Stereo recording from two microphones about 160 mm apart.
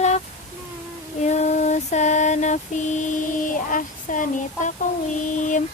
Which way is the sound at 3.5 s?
55° left (ahead or behind).